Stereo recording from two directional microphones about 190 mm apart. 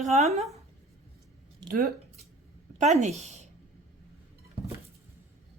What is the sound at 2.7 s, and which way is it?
Speech, 40° right (ahead or behind).